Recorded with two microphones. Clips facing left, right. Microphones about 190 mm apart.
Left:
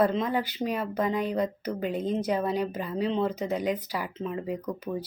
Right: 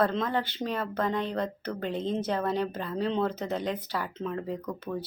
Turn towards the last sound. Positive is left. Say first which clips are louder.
# left 2 dB
turn(degrees=15)  # may be behind; listen again after turning